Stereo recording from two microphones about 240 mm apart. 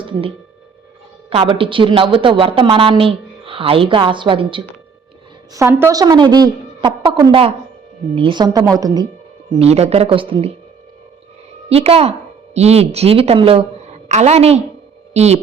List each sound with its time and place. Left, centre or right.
0.0 s a sound: right
1.3 s a woman's voice: right
9.5 s a woman's voice: right
11.7 s a woman's voice: right